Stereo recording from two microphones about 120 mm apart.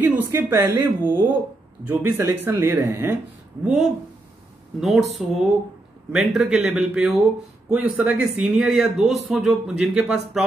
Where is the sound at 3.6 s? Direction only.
Centre (ahead or behind).